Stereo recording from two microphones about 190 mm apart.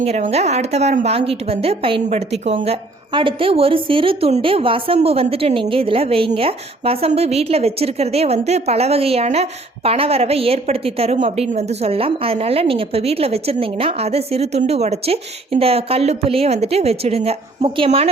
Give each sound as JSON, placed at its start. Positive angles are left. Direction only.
{"t": 0.0, "sound": "a woman's voice", "side_deg": -35}